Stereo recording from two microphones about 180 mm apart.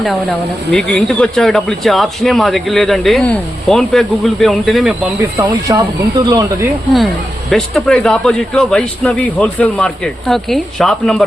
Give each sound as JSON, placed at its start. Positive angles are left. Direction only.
{"t": 0.0, "sound": "speech", "side_deg": 0}
{"t": 5.4, "sound": "speech", "side_deg": -20}
{"t": 7.5, "sound": "speech", "side_deg": 0}